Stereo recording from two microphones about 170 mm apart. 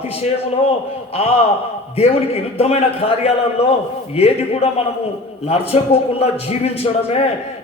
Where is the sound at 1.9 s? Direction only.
35° left (ahead or behind).